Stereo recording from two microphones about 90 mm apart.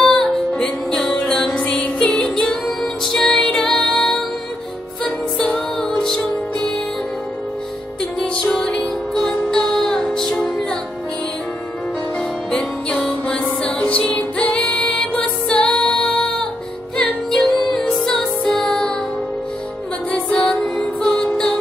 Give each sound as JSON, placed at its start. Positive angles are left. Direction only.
{"t": 0.0, "sound": "music", "side_deg": 5}
{"t": 8.0, "sound": "music", "side_deg": 10}
{"t": 12.4, "sound": "music", "side_deg": 5}
{"t": 20.1, "sound": "music", "side_deg": 10}